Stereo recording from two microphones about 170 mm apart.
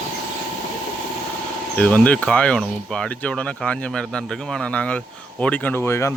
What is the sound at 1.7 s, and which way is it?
Speech, 5° left (ahead or behind).